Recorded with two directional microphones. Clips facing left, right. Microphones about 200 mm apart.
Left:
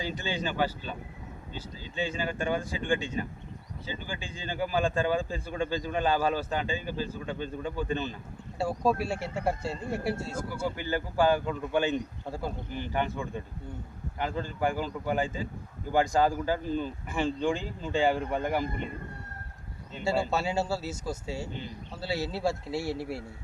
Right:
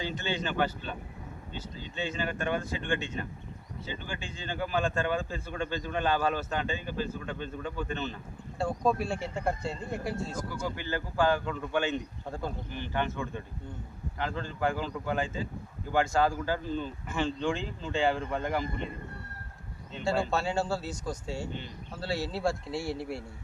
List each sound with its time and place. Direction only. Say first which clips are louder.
0.0 s speech: left 1 dB; 10° left (ahead or behind)
2.0 s speech: left 2 dB; 10° left (ahead or behind)
4.5 s speech: left 2 dB; 10° left (ahead or behind)
19.9 s a man's voice: left 1 dB; 5° left (ahead or behind)